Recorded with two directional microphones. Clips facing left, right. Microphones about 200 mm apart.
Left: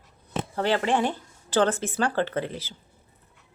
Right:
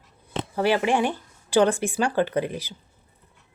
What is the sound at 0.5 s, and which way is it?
Speech, 10° right (ahead or behind).